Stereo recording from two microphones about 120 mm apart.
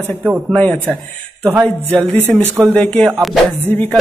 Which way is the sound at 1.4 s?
15° right (ahead or behind).